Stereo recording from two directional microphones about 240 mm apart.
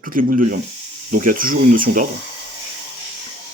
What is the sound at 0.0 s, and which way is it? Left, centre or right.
Speech, right.